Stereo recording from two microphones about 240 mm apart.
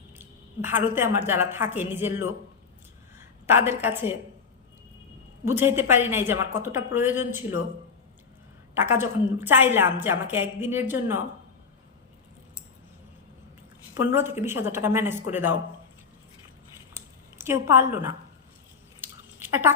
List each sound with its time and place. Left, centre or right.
0.2 s a woman's voice: centre
3.2 s a sound: centre
3.8 s a woman's voice: centre
5.5 s a woman's voice: centre
8.7 s a woman's voice: centre
14.0 s a woman's voice: centre
16.9 s a sound: centre